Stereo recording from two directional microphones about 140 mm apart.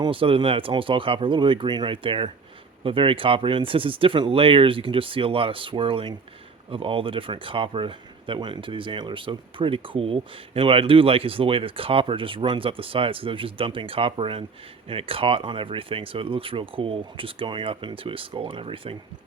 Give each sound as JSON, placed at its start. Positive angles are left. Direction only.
{"t": 0.0, "sound": "speech", "side_deg": -40}